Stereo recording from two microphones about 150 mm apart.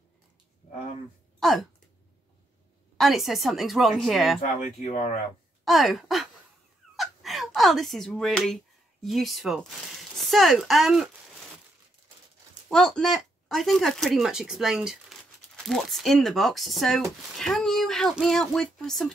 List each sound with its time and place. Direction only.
1.4 s a sound: centre (ahead or behind)
3.0 s speech: centre (ahead or behind)
4.4 s speech: 50° left (ahead or behind)
5.7 s speech: centre (ahead or behind)
12.6 s speech: 5° left (ahead or behind)